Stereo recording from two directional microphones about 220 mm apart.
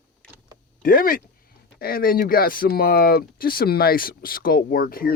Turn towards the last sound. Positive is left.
turn(degrees=40)  # may be behind; listen again after turning